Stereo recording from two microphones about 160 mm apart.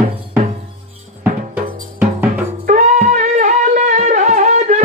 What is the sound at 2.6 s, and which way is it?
Music, 50° right (ahead or behind).